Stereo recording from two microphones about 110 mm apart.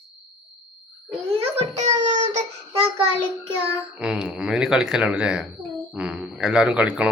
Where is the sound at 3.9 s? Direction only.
10° right (ahead or behind).